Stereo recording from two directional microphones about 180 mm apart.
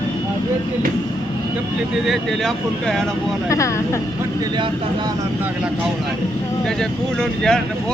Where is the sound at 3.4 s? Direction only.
15° left (ahead or behind).